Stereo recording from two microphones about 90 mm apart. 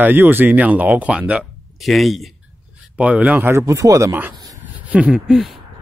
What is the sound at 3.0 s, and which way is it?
Speech, 15° right (ahead or behind).